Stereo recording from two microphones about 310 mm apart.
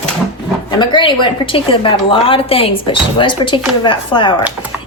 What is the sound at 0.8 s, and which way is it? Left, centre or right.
Speech, centre.